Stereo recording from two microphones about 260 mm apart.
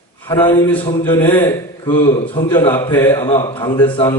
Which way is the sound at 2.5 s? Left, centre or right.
Centre.